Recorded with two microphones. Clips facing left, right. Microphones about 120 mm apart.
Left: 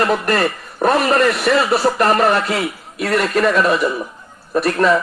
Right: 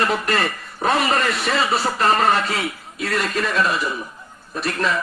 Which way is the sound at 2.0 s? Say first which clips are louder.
Left 3 dB; 65° left (ahead or behind).